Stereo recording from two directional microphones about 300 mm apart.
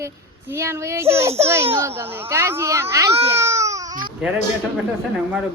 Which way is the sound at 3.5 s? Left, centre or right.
Centre.